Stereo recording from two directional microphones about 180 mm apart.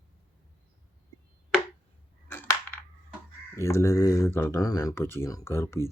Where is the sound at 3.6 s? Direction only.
15° left (ahead or behind).